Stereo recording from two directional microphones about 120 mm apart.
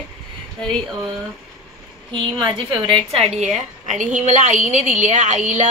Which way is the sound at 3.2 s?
70° right (ahead or behind).